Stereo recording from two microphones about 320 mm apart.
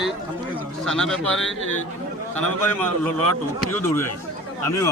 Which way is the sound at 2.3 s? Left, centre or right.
Centre.